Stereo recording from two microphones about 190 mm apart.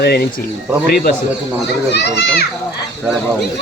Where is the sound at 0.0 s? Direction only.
55° left (ahead or behind).